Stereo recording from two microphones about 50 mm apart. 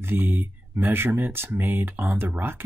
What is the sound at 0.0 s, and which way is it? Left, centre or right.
Speech, right.